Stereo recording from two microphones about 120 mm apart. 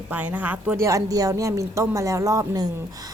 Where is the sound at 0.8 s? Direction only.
25° right (ahead or behind).